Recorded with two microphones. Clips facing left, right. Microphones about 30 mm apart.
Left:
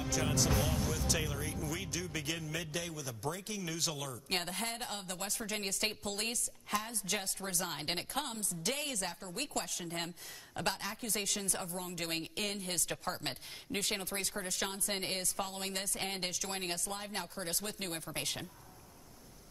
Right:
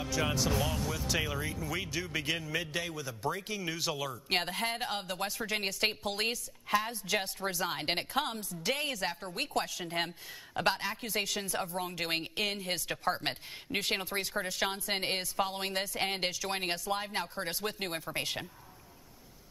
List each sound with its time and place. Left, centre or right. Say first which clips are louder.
0.2 s a man's voice: right 5 dB; right
0.6 s speech: right 1 dB; right
0.9 s a man's voice: right 3 dB; right